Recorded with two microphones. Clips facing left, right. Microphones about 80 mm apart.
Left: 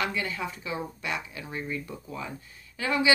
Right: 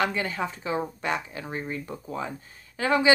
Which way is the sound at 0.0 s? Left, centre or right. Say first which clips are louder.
Right 4 dB; right.